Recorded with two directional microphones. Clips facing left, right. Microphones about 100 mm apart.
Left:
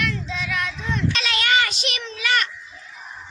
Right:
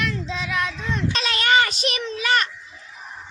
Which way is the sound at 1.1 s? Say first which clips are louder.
Right 4 dB; 35° right (ahead or behind).